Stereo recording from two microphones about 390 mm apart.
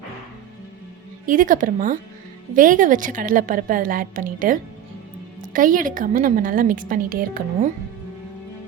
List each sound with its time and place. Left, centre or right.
1.3 s a woman's voice: centre